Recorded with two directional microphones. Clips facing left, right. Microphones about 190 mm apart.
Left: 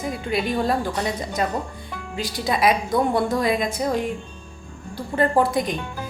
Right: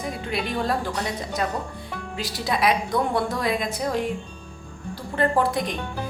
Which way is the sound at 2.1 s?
Centre (ahead or behind).